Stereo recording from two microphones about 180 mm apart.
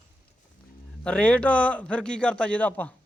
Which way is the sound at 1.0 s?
5° left (ahead or behind).